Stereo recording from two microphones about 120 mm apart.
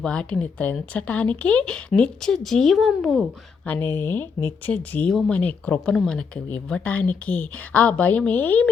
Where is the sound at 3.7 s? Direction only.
20° left (ahead or behind).